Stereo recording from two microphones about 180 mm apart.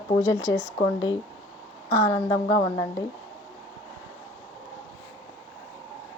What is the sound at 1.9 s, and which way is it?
Speech, 20° left (ahead or behind).